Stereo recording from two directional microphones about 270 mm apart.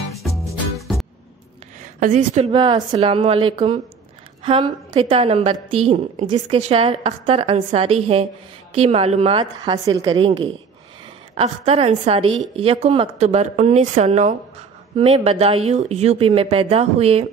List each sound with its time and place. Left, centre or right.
0.7 s music: centre
1.8 s a woman's voice: right